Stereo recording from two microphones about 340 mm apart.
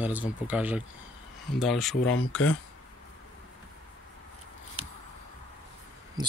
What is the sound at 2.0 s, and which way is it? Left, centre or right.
Speech, left.